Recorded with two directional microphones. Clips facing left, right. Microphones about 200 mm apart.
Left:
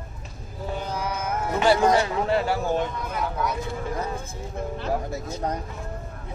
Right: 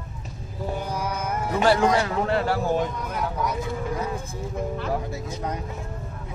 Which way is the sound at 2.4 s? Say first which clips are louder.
Right 1 dB; centre (ahead or behind).